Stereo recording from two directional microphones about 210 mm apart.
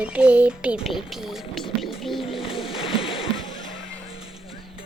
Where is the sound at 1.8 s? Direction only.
Centre (ahead or behind).